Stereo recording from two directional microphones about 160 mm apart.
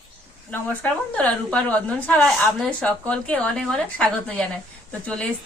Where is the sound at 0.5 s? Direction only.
10° left (ahead or behind).